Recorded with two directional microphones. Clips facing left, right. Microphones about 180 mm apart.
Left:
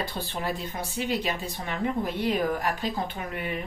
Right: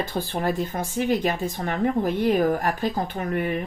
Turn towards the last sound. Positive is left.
turn(degrees=-45)  # may be behind; listen again after turning